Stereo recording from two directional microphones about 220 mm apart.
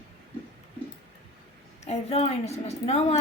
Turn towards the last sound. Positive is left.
turn(degrees=30)  # may be behind; listen again after turning